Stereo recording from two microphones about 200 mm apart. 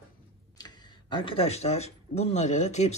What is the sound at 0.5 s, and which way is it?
Speech, 20° left (ahead or behind).